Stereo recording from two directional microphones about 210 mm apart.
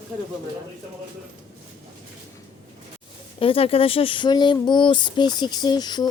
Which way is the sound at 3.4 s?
25° left (ahead or behind).